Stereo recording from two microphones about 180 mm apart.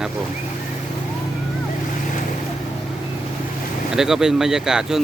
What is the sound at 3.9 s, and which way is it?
Speech, 5° right (ahead or behind).